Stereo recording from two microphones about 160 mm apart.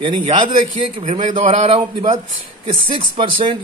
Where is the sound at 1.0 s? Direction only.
50° right (ahead or behind).